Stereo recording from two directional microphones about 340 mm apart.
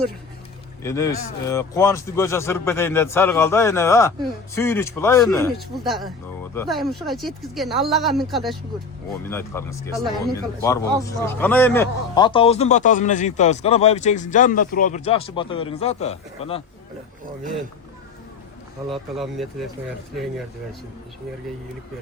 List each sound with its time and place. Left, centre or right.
0.8 s a man's voice: centre
18.9 s speech: centre